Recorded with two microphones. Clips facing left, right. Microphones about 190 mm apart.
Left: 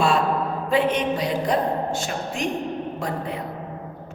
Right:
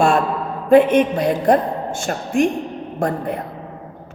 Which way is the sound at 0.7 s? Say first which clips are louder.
Right 10 dB; 50° right (ahead or behind).